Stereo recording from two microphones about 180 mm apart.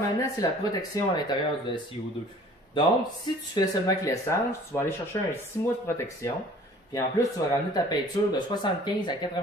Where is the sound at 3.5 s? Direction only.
15° left (ahead or behind).